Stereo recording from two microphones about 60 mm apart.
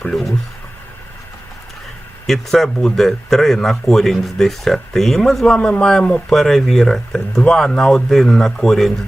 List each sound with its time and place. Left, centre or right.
0.0 s speech: centre
2.2 s speech: centre
5.5 s speech: centre